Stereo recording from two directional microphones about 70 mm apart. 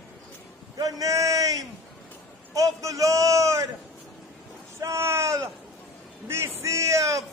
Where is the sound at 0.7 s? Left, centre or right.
Right.